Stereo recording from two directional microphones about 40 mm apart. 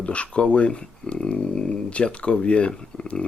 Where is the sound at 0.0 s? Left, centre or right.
Left.